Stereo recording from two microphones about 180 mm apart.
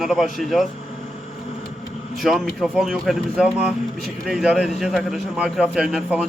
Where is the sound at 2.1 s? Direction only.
Centre (ahead or behind).